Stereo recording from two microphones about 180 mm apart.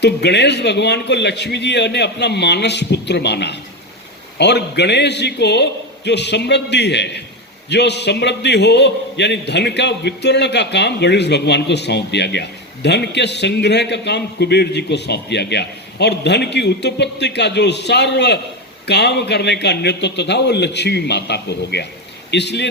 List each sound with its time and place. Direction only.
0.0 s a man's voice: 70° left (ahead or behind)